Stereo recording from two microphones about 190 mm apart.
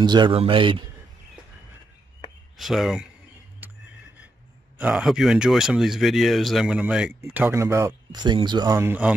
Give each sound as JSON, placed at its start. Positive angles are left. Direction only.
{"t": 0.0, "sound": "a man's voice", "side_deg": -25}
{"t": 2.5, "sound": "speech", "side_deg": 0}
{"t": 3.6, "sound": "music", "side_deg": -10}
{"t": 4.7, "sound": "speech", "side_deg": -5}